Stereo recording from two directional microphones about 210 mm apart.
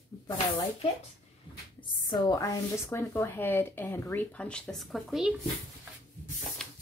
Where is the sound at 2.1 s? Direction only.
15° left (ahead or behind); by 5.4 s centre (ahead or behind).